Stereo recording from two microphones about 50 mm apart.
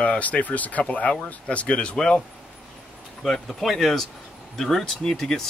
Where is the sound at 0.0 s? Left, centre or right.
Left.